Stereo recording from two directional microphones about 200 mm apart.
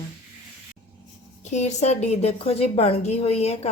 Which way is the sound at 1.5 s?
35° left (ahead or behind).